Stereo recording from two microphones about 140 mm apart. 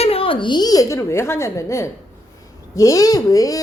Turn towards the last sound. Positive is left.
turn(degrees=25)  # may be behind; listen again after turning